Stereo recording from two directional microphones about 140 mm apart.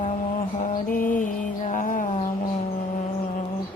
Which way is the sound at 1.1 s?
70° left (ahead or behind).